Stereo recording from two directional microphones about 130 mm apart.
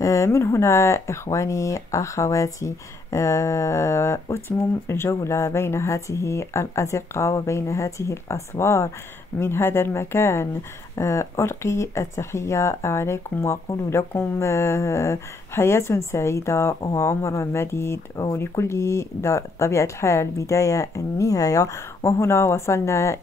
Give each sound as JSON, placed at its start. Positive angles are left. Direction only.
{"t": 0.0, "sound": "speech", "side_deg": 25}